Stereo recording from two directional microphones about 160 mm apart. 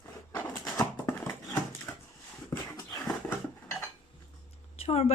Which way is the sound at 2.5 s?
15° left (ahead or behind).